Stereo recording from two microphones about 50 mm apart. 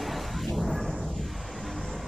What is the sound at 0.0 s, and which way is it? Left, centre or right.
Music, centre.